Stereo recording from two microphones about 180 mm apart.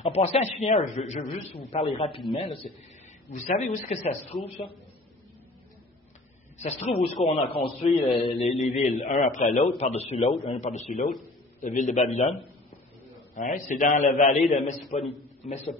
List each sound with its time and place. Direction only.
0.0 s a man's voice: 35° left (ahead or behind)
3.4 s a man's voice: 40° left (ahead or behind)
6.6 s a man's voice: 40° left (ahead or behind)